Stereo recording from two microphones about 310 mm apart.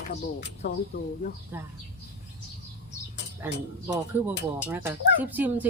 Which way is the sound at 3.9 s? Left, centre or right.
Centre.